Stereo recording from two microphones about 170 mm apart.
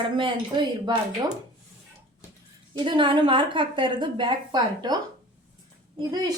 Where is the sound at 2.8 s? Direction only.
30° right (ahead or behind).